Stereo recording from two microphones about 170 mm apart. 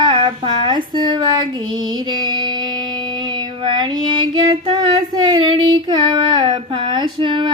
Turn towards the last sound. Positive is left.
turn(degrees=-30)  # may be behind; listen again after turning